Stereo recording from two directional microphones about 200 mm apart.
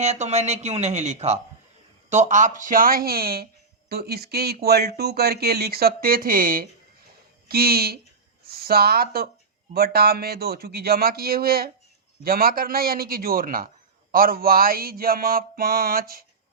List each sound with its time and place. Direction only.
0.0 s speech: 35° right (ahead or behind)